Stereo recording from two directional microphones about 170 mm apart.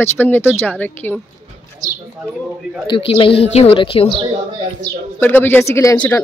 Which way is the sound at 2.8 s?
30° left (ahead or behind).